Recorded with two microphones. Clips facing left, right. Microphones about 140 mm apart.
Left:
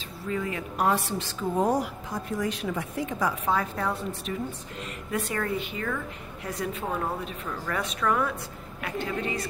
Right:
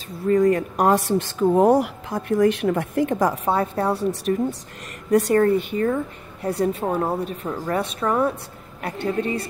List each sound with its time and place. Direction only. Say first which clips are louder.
0.3 s speech: right 13 dB; 45° right (ahead or behind)
3.4 s a woman's voice: right 6 dB; 30° right (ahead or behind)
5.1 s a woman's voice: right 13 dB; 40° right (ahead or behind)